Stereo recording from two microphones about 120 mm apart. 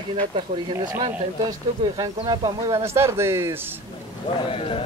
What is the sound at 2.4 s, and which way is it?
Speech, 25° right (ahead or behind).